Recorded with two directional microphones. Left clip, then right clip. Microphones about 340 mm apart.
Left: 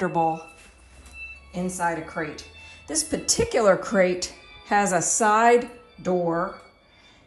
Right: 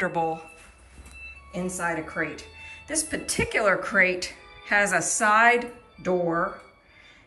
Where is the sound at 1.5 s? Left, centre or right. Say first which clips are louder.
Left 2 dB; centre.